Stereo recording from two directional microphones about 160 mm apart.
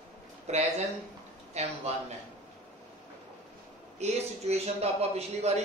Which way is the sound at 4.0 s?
40° right (ahead or behind).